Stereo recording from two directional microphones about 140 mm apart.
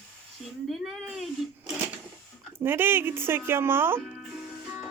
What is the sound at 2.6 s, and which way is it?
Speech, 15° right (ahead or behind).